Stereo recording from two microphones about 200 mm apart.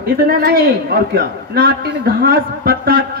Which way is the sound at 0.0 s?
50° right (ahead or behind).